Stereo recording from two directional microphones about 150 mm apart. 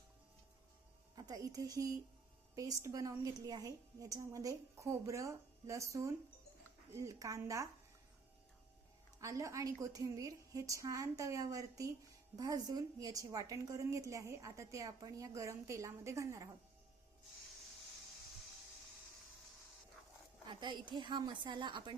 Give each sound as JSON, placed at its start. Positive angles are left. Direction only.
{"t": 1.1, "sound": "a woman's voice", "side_deg": -25}
{"t": 9.2, "sound": "a woman's voice", "side_deg": -20}
{"t": 20.5, "sound": "a woman's voice", "side_deg": -30}